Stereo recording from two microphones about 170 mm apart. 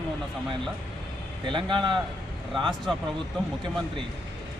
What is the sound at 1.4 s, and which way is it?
Speech, 30° right (ahead or behind).